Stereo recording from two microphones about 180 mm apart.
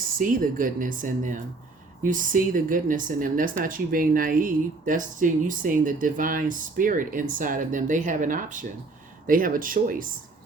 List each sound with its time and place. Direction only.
0.2 s speech: 50° right (ahead or behind)